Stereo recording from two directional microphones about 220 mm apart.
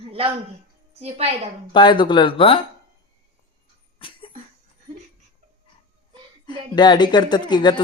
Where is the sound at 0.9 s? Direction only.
30° right (ahead or behind).